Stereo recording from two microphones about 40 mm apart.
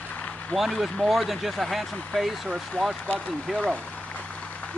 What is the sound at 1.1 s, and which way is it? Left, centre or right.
Speech, centre.